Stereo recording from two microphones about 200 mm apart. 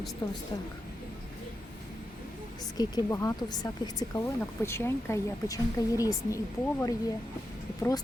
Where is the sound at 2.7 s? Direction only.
15° left (ahead or behind).